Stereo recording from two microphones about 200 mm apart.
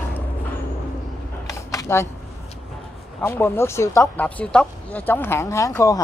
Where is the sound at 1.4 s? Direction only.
15° left (ahead or behind).